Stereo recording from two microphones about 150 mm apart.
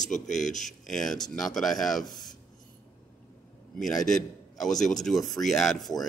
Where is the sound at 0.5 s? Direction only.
55° left (ahead or behind).